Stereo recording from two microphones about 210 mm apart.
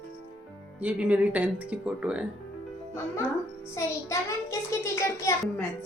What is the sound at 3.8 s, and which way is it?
A child's voice, 15° left (ahead or behind).